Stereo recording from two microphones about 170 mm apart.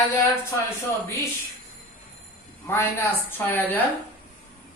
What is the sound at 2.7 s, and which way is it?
A woman's voice, 10° left (ahead or behind).